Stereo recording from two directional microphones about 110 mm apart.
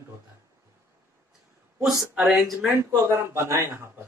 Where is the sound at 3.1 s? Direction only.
25° right (ahead or behind).